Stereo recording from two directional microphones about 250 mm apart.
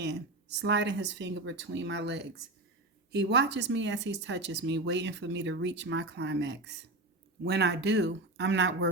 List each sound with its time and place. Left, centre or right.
0.0 s speech: right